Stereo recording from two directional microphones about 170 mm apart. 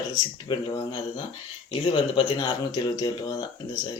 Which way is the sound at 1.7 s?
30° left (ahead or behind).